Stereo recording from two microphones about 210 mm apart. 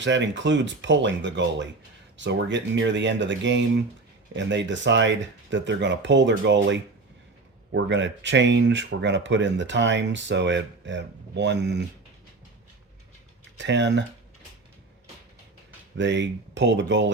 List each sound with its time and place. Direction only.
0.0 s speech: 60° right (ahead or behind)
13.6 s speech: 60° right (ahead or behind)
16.0 s speech: 60° right (ahead or behind)